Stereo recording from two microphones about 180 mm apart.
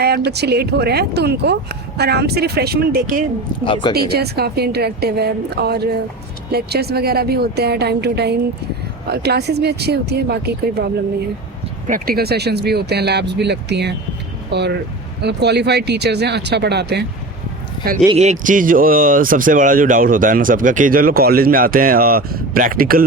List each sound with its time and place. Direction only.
0.3 s speech: 65° right (ahead or behind)
3.6 s speech: 25° left (ahead or behind)
3.9 s speech: 60° right (ahead or behind)
11.9 s speech: 55° right (ahead or behind); by 17.1 s 70° right (ahead or behind)
18.1 s speech: 40° right (ahead or behind)